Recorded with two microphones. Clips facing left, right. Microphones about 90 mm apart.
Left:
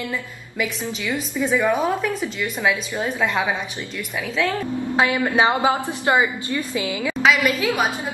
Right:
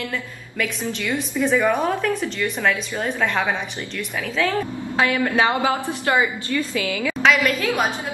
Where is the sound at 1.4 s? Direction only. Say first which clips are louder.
Right 1 dB; 10° left (ahead or behind).